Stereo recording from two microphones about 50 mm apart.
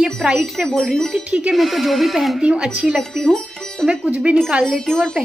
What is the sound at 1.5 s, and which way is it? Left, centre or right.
Speech, centre.